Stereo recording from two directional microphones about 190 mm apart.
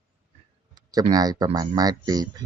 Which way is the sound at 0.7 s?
20° right (ahead or behind).